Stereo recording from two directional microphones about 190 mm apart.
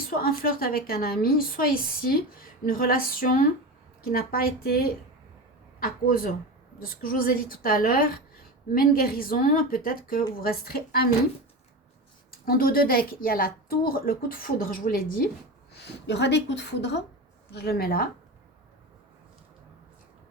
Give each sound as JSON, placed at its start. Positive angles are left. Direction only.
{"t": 0.1, "sound": "a woman's voice", "side_deg": 50}
{"t": 12.5, "sound": "a woman's voice", "side_deg": 50}
{"t": 15.7, "sound": "speech", "side_deg": 65}